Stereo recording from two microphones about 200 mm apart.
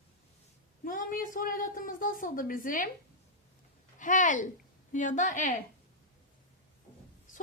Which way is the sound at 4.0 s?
40° left (ahead or behind).